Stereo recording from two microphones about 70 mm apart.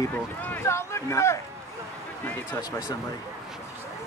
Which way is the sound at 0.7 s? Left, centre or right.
Left.